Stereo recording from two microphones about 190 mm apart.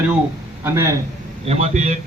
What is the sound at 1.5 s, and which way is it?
Speech, 35° right (ahead or behind).